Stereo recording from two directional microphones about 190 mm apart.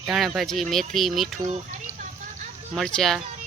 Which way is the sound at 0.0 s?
Centre (ahead or behind).